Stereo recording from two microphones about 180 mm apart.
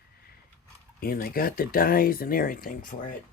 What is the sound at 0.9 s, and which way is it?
Speech, 55° left (ahead or behind).